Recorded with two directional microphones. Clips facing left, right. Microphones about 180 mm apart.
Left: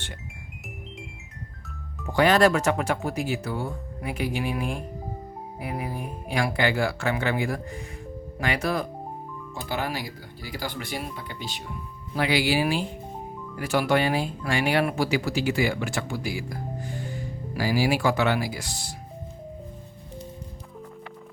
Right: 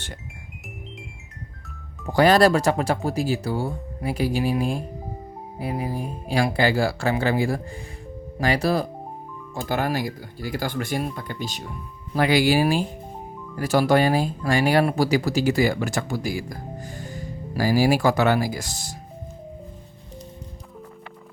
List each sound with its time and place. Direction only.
2.1 s speech: 35° right (ahead or behind)
9.6 s speech: 50° right (ahead or behind)